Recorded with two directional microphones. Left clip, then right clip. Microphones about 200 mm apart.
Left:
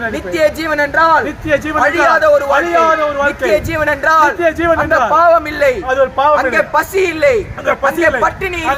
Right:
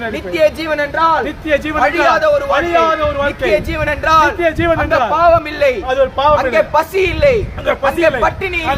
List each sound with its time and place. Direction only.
0.3 s a man's voice: 20° left (ahead or behind)
1.5 s a man's voice: centre (ahead or behind)
2.1 s speech: 15° left (ahead or behind)
2.5 s a man's voice: centre (ahead or behind)
3.5 s speech: 15° left (ahead or behind)
4.4 s a man's voice: 5° right (ahead or behind)
5.1 s speech: 15° left (ahead or behind)
5.9 s a man's voice: 5° right (ahead or behind)
6.5 s speech: 15° left (ahead or behind)
7.6 s a man's voice: 10° right (ahead or behind)